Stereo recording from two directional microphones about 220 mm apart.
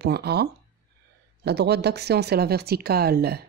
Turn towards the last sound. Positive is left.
turn(degrees=-45)  # may be behind; listen again after turning